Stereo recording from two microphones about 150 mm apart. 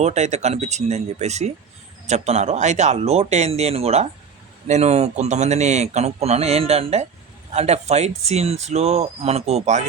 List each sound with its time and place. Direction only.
0.0 s speech: 50° right (ahead or behind)